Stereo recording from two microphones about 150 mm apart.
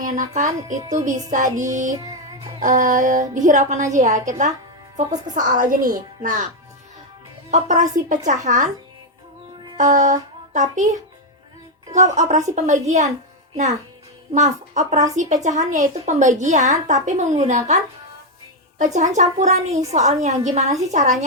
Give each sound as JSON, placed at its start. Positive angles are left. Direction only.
{"t": 0.0, "sound": "a woman's voice", "side_deg": -55}
{"t": 7.5, "sound": "a woman's voice", "side_deg": -55}
{"t": 9.9, "sound": "a woman's voice", "side_deg": -55}
{"t": 11.9, "sound": "a woman's voice", "side_deg": -50}
{"t": 14.3, "sound": "a woman's voice", "side_deg": -50}
{"t": 18.8, "sound": "a woman's voice", "side_deg": -55}